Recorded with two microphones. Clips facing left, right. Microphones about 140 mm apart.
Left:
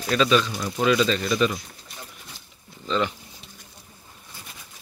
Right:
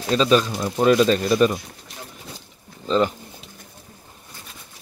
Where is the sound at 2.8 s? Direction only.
40° right (ahead or behind).